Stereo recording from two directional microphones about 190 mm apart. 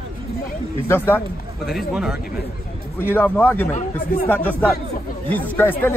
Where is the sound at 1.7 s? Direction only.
Centre (ahead or behind).